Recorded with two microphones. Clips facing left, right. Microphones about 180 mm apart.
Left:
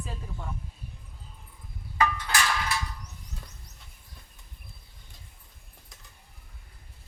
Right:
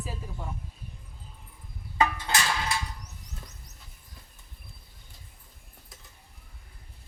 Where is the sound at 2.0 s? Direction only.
25° right (ahead or behind).